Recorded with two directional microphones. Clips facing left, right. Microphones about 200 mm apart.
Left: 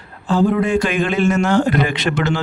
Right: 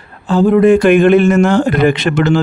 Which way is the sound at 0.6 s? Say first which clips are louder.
Right 10 dB; 55° right (ahead or behind).